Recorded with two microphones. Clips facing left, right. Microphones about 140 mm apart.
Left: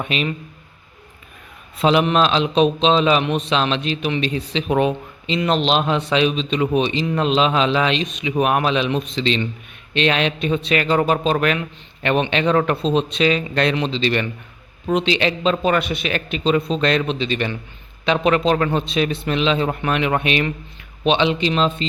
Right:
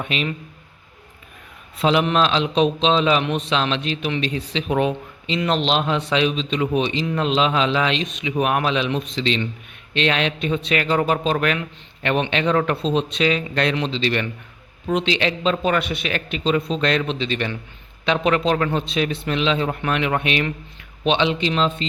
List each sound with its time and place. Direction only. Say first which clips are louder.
0.0 s a man's voice: left 2 dB; 20° left (ahead or behind)
1.8 s a man's voice: left 2 dB; 20° left (ahead or behind)
17.1 s a man's voice: left 2 dB; 10° left (ahead or behind)